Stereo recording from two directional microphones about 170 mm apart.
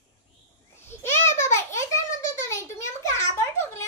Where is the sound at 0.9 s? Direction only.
15° left (ahead or behind).